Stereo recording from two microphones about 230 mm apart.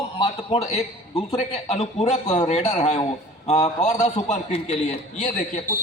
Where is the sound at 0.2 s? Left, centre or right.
Left.